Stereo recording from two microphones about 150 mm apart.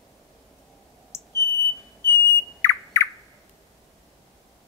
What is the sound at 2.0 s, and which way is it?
Whistle, 15° left (ahead or behind).